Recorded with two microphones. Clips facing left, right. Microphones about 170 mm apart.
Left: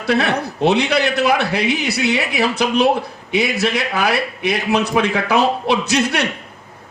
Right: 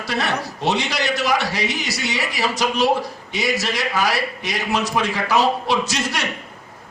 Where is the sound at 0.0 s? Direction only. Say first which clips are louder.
Left 6 dB; 60° left (ahead or behind).